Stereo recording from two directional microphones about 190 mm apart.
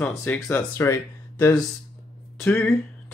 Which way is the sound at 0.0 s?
10° left (ahead or behind).